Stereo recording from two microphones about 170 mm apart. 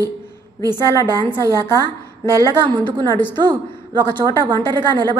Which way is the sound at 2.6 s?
25° right (ahead or behind).